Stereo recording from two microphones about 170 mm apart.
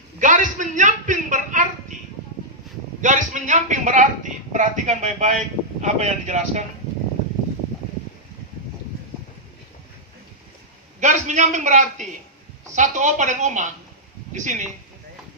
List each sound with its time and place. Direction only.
0.2 s a sound: 50° right (ahead or behind)
3.0 s a man's voice: 50° right (ahead or behind)
11.0 s a man's voice: 45° right (ahead or behind)